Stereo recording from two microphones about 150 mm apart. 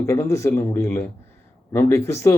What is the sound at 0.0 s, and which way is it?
Speech, 20° left (ahead or behind).